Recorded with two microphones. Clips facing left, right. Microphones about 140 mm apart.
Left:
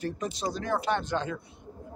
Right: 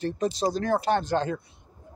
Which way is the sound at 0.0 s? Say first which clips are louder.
Right 6 dB; 35° right (ahead or behind).